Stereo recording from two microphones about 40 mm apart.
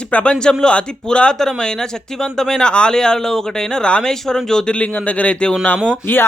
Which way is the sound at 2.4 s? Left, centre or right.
Centre.